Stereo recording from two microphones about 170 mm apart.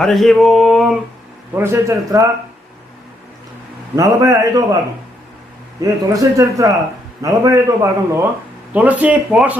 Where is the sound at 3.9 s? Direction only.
20° right (ahead or behind).